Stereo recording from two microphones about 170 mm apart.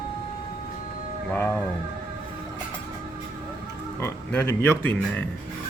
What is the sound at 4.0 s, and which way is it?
Speech, 15° left (ahead or behind).